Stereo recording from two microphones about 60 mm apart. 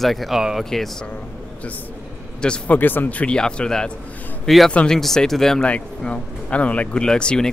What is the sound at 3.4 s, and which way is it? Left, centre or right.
Speech, centre.